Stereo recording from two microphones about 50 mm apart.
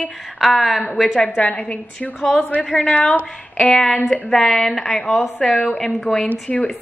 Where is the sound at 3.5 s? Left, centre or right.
Centre.